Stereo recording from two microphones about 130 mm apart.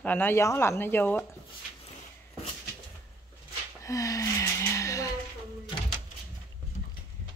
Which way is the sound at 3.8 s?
25° left (ahead or behind).